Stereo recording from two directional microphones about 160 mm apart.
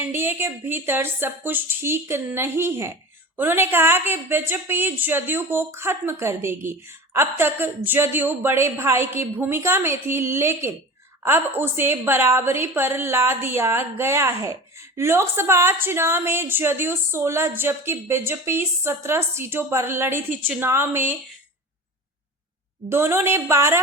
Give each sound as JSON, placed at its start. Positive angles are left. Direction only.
{"t": 0.0, "sound": "a woman's voice", "side_deg": -15}
{"t": 22.9, "sound": "a woman's voice", "side_deg": -15}